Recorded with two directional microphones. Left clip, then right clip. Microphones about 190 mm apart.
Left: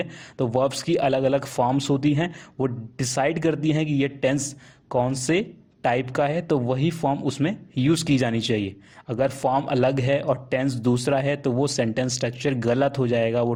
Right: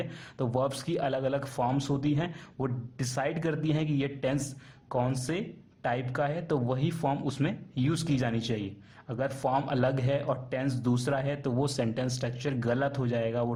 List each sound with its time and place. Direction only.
0.0 s a man's voice: 25° left (ahead or behind)